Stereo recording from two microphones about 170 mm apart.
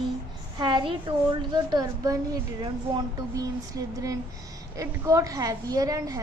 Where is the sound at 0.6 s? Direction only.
25° right (ahead or behind).